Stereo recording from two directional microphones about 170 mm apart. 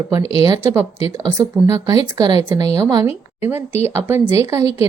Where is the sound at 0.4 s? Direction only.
20° right (ahead or behind).